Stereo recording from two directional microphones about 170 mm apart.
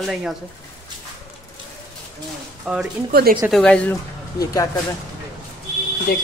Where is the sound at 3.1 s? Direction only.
60° right (ahead or behind).